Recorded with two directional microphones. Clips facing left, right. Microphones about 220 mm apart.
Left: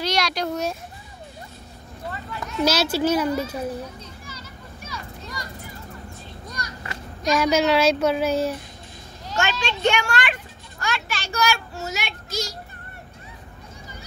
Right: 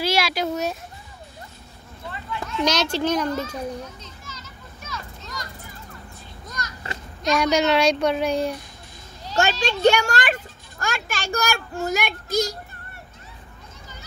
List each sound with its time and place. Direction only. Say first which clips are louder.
0.0 s speech: right 2 dB; 5° right (ahead or behind)
2.6 s children playing: left 2 dB; 5° left (ahead or behind)
7.2 s a woman's voice: even; 5° left (ahead or behind)
9.2 s a child's voice: right 3 dB; 30° right (ahead or behind); by 12.5 s 50° right (ahead or behind)